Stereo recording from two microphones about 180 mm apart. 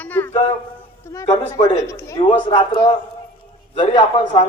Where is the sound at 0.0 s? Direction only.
10° left (ahead or behind).